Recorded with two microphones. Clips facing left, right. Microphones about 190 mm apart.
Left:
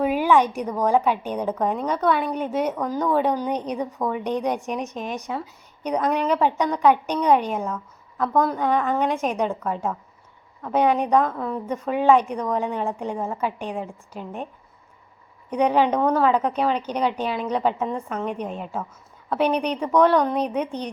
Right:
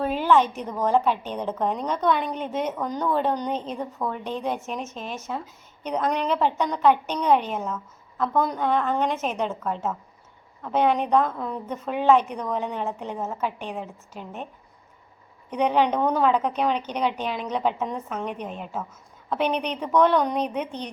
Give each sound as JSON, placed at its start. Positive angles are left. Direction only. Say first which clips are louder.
{"t": 0.0, "sound": "a woman's voice", "louder": "left 2 dB", "side_deg": 10}
{"t": 14.1, "sound": "speech", "louder": "left 3 dB", "side_deg": 45}
{"t": 15.4, "sound": "a woman's voice", "louder": "left 2 dB", "side_deg": 10}
{"t": 19.3, "sound": "a woman's voice", "louder": "left 3 dB", "side_deg": 10}